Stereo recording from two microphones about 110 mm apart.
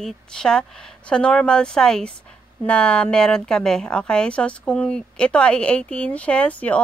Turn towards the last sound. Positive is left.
turn(degrees=10)  # may be behind; listen again after turning